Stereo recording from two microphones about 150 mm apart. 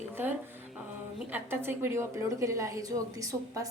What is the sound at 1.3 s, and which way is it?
A woman's voice, 15° right (ahead or behind).